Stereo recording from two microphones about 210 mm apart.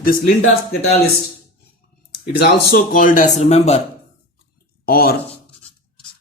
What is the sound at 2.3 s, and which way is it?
Speech, 45° left (ahead or behind).